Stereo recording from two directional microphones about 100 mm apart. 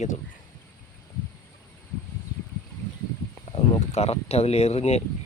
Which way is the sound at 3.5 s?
90° left.